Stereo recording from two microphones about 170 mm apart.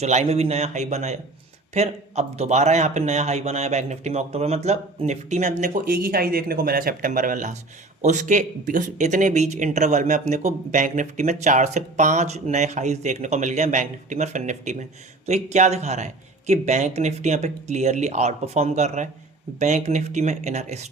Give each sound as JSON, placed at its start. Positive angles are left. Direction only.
{"t": 0.0, "sound": "a man's voice", "side_deg": -40}